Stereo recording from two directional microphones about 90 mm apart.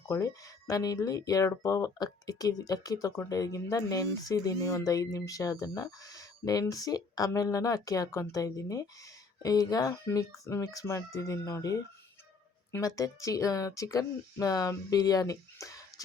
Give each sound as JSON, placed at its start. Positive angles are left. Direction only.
{"t": 0.0, "sound": "speech", "side_deg": 40}
{"t": 9.9, "sound": "speech", "side_deg": 30}
{"t": 12.8, "sound": "speech", "side_deg": 40}